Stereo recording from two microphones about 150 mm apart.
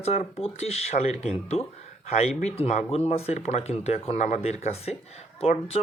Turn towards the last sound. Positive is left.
turn(degrees=45)  # may be behind; listen again after turning